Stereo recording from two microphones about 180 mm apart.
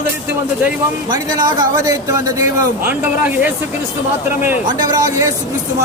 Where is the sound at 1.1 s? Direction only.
25° right (ahead or behind).